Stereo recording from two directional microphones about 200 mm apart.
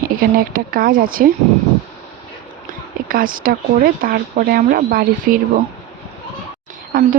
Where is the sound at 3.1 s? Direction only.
45° right (ahead or behind).